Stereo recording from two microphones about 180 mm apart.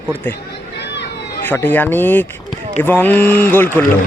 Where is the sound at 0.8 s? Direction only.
70° left (ahead or behind).